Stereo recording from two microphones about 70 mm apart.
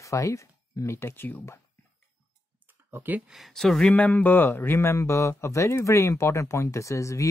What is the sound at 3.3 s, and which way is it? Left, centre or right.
Speech, centre.